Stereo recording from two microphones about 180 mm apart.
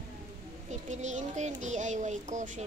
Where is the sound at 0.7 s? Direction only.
40° right (ahead or behind).